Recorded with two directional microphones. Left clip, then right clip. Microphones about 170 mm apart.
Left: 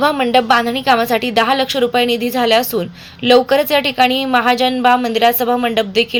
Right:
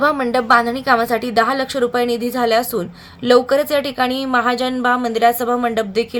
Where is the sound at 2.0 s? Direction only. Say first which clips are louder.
Left 3 dB; 40° left (ahead or behind).